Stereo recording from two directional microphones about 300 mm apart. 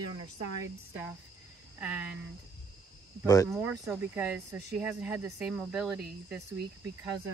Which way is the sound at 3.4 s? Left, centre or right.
Centre.